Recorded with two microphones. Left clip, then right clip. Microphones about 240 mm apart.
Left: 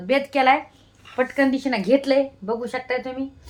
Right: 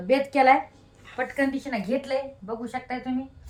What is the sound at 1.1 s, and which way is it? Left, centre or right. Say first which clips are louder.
Speech: left 6 dB; left.